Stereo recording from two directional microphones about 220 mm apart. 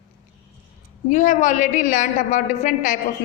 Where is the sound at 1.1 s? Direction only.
35° left (ahead or behind).